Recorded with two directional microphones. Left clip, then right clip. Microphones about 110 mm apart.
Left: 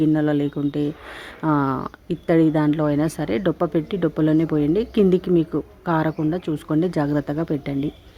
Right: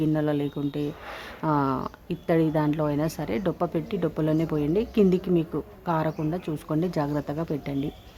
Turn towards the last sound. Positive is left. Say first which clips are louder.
# left 5 dB
turn(degrees=35)  # may be behind; listen again after turning